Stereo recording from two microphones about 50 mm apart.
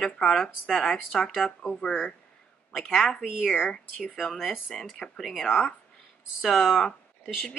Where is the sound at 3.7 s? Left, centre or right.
Centre.